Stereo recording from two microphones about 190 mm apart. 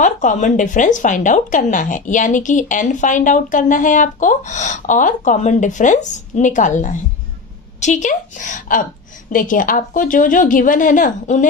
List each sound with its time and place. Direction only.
0.0 s a woman's voice: 40° left (ahead or behind)